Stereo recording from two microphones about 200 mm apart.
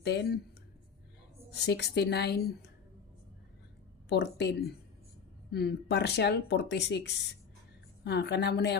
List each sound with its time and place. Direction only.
0.0 s speech: 55° left (ahead or behind)
1.5 s speech: 55° left (ahead or behind)
4.1 s speech: 55° left (ahead or behind)